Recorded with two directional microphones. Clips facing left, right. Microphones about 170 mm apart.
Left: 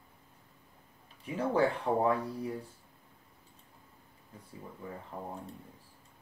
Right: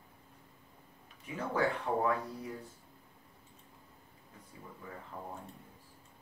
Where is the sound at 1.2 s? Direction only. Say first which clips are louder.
Left 4 dB; 30° left (ahead or behind).